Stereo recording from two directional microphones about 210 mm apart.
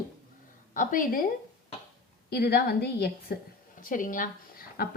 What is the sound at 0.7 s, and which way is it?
Speech, 40° left (ahead or behind).